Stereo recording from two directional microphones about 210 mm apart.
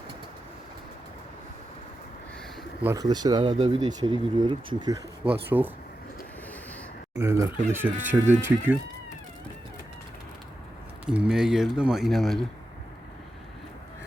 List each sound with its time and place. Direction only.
2.8 s speech: 15° right (ahead or behind)
5.2 s speech: 10° right (ahead or behind)
7.2 s speech: 10° right (ahead or behind)
11.0 s speech: 5° right (ahead or behind)